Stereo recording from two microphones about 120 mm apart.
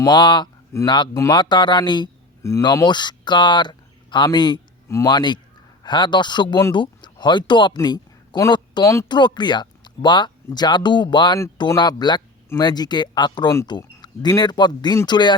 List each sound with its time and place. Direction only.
0.0 s speech: 40° left (ahead or behind)
2.4 s speech: 25° left (ahead or behind)
2.8 s a man's voice: 40° left (ahead or behind)
8.8 s speech: 25° left (ahead or behind)
9.0 s speech: 40° left (ahead or behind)